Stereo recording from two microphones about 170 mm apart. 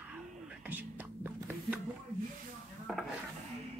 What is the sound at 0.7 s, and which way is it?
Whispering, 10° right (ahead or behind).